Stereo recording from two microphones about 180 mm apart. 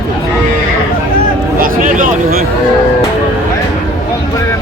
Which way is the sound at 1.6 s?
50° right (ahead or behind).